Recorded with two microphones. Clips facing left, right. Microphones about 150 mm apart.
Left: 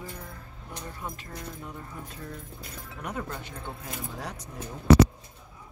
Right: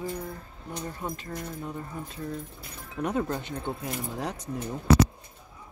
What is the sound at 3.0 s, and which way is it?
Speech, 30° right (ahead or behind).